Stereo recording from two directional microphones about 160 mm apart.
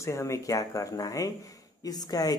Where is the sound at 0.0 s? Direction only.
20° left (ahead or behind).